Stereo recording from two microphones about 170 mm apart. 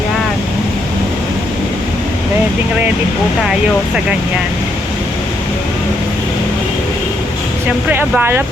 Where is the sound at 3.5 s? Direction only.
5° right (ahead or behind).